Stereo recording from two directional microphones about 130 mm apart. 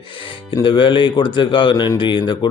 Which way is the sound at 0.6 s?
40° left (ahead or behind).